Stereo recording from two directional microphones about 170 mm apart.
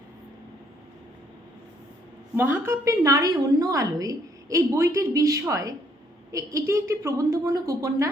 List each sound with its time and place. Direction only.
2.3 s a woman's voice: 15° right (ahead or behind)